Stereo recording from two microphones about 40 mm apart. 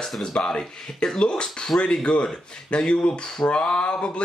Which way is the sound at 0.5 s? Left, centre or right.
Centre.